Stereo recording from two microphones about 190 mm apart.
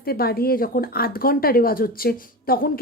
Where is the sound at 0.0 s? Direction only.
55° left (ahead or behind).